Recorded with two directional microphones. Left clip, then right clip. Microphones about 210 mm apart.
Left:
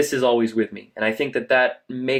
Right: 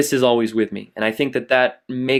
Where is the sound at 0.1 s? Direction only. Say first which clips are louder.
Right 2 dB; 50° right (ahead or behind).